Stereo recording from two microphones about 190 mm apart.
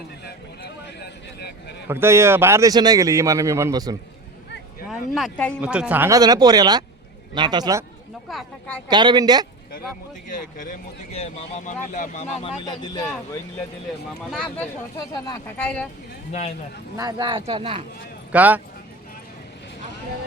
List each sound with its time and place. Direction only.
0.3 s a sound: 60° left (ahead or behind)
1.9 s speech: 15° right (ahead or behind)
4.9 s a sound: centre (ahead or behind)
5.5 s speech: 5° right (ahead or behind)
8.3 s speech: 5° left (ahead or behind)
8.9 s speech: 25° right (ahead or behind)
10.2 s speech: 45° left (ahead or behind); by 13.1 s 20° left (ahead or behind)
14.3 s speech: 5° left (ahead or behind)
14.9 s speech: 20° left (ahead or behind)
17.0 s speech: 20° right (ahead or behind)
18.3 s speech: 10° right (ahead or behind)